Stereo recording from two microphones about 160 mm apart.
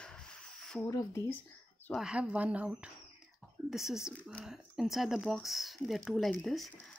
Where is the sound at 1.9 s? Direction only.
5° right (ahead or behind).